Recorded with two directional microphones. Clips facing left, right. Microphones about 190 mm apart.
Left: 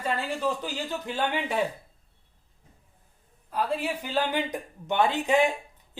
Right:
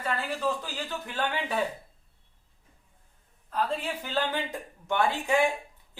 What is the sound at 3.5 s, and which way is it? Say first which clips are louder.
Speech: left 2 dB; 10° left (ahead or behind).